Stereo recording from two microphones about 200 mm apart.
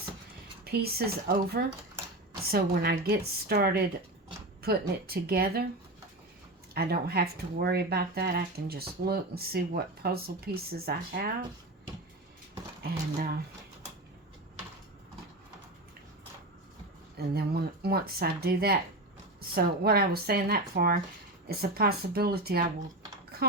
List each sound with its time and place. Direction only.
0.6 s speech: 50° right (ahead or behind)
6.7 s speech: 50° right (ahead or behind)
12.9 s speech: 50° right (ahead or behind)
17.2 s speech: 50° right (ahead or behind)
23.3 s typing: 50° right (ahead or behind)